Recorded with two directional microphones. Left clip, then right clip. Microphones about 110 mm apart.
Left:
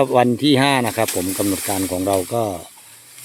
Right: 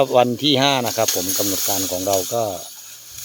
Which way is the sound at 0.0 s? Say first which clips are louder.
Even; 20° left (ahead or behind).